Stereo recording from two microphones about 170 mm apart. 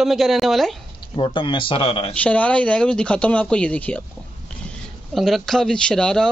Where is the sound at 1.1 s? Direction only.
30° left (ahead or behind).